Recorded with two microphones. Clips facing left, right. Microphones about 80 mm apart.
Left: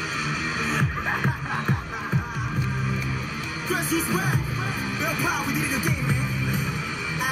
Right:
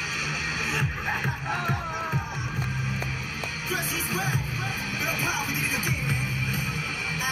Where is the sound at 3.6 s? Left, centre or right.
Left.